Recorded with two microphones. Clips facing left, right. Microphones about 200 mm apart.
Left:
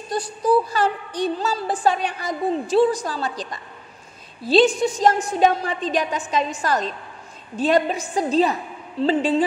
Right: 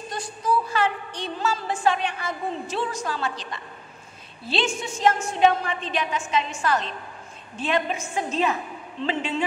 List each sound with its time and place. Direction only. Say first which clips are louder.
0.1 s a woman's voice: left 7 dB; 35° left (ahead or behind)